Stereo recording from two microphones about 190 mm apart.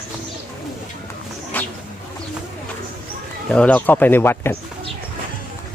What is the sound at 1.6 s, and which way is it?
Bird, 10° left (ahead or behind).